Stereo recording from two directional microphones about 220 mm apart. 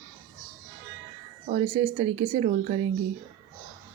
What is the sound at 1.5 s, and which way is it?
Speech, 30° right (ahead or behind).